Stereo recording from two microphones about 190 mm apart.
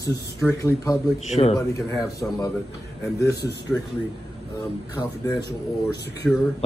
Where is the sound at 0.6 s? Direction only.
20° left (ahead or behind).